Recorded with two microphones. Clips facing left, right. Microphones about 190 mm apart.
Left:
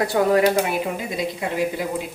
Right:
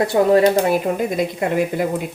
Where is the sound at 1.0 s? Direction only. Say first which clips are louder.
Right 6 dB; 50° right (ahead or behind).